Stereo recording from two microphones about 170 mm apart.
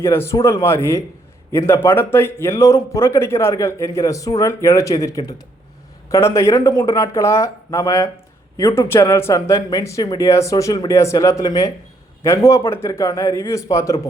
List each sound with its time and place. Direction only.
0.0 s speech: 15° left (ahead or behind)